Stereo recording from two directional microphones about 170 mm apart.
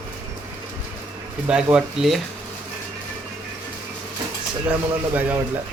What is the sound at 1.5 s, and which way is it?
Speech, 5° right (ahead or behind).